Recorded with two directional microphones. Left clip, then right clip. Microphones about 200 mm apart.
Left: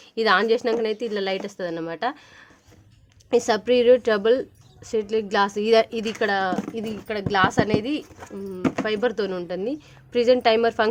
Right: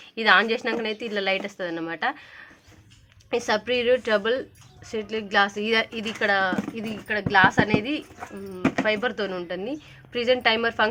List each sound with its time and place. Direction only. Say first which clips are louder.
0.2 s a woman's voice: even; 60° left (ahead or behind)
3.2 s a woman's voice: left 4 dB; 55° left (ahead or behind)